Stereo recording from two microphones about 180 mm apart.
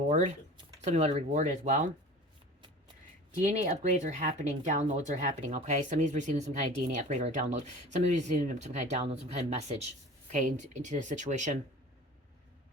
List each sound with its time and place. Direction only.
0.1 s speech: 40° right (ahead or behind)
3.4 s speech: 45° right (ahead or behind)